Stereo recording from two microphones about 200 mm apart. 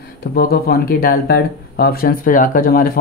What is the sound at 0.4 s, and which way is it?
Speech, 50° left (ahead or behind).